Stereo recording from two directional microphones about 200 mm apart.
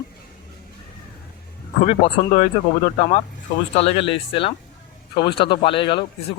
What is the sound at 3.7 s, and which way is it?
Speech, 30° left (ahead or behind).